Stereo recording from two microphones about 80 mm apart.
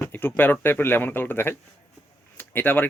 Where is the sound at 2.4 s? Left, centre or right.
Left.